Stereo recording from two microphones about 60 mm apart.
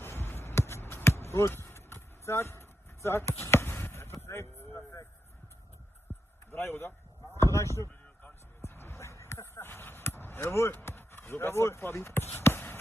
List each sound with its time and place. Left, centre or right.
0.0 s basketball bounce: left
4.2 s vehicle: left
6.1 s heart sounds: left
6.5 s speech: left
8.5 s basketball bounce: left
10.7 s speech: left